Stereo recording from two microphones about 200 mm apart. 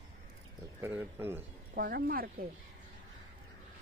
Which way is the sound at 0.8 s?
10° right (ahead or behind).